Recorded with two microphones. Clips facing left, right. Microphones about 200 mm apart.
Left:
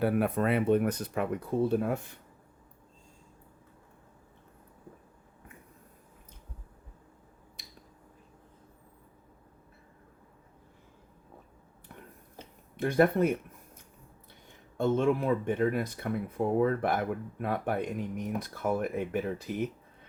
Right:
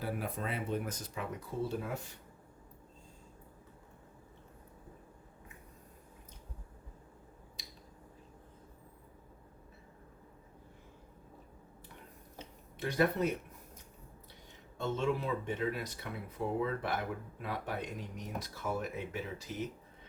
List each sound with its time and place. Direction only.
0.0 s speech: 65° left (ahead or behind)
7.6 s finger snapping: 55° left (ahead or behind)
12.7 s speech: 55° left (ahead or behind)
14.8 s speech: 55° left (ahead or behind)